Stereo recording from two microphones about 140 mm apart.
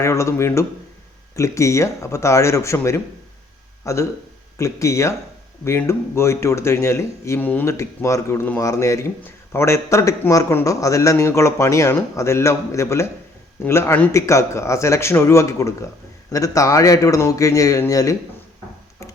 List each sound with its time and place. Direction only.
0.0 s a man's voice: 20° left (ahead or behind)